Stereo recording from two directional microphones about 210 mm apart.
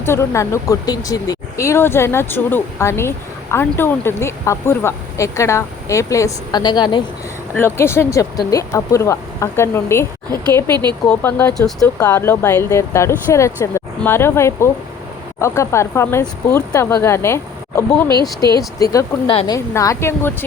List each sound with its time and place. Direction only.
0.0 s speech: 10° left (ahead or behind)
10.5 s speech: 20° right (ahead or behind)
11.1 s speech: 10° left (ahead or behind)